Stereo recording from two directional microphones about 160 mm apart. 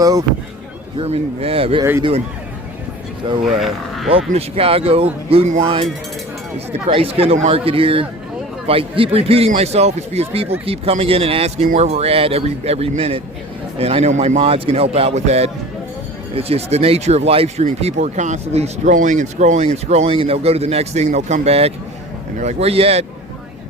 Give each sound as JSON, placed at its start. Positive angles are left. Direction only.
{"t": 0.0, "sound": "speech", "side_deg": -25}
{"t": 0.9, "sound": "speech", "side_deg": -40}
{"t": 1.8, "sound": "speech", "side_deg": -20}
{"t": 3.4, "sound": "speech", "side_deg": 0}
{"t": 4.1, "sound": "speech", "side_deg": -35}
{"t": 6.9, "sound": "speech", "side_deg": -35}